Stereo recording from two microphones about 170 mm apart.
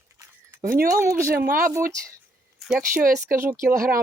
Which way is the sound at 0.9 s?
15° right (ahead or behind).